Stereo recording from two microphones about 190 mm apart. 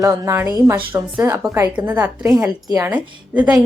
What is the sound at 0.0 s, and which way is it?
A woman's voice, 15° right (ahead or behind).